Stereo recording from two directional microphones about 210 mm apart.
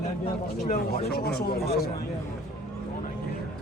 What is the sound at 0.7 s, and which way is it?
Speech, 45° left (ahead or behind).